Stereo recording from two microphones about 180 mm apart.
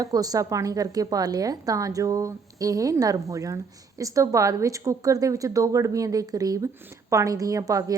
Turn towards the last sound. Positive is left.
turn(degrees=-20)  # may be behind; listen again after turning